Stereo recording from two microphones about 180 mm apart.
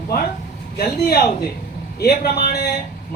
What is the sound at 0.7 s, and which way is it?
Speech, 60° left (ahead or behind).